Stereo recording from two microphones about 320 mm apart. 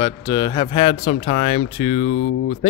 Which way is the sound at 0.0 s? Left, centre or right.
Centre.